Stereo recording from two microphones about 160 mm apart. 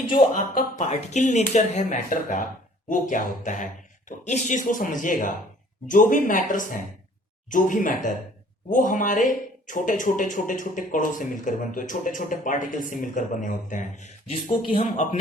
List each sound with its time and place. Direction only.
0.3 s speech: 50° left (ahead or behind); by 15.2 s 35° left (ahead or behind)